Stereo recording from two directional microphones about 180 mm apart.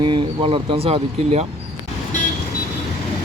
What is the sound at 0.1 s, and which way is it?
Speech, 30° right (ahead or behind).